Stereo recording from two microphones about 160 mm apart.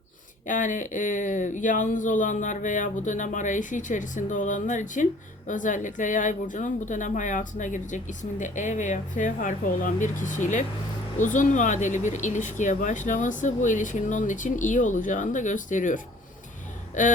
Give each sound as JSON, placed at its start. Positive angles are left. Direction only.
{"t": 0.4, "sound": "a woman's voice", "side_deg": 55}